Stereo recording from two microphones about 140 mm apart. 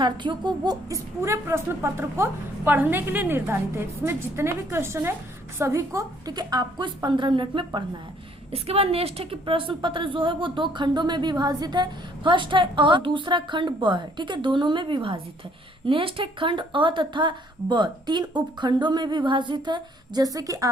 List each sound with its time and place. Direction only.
0.0 s a woman's voice: 35° right (ahead or behind)